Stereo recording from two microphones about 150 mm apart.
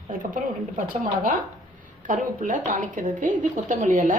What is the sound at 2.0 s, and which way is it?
A woman's voice, 55° right (ahead or behind).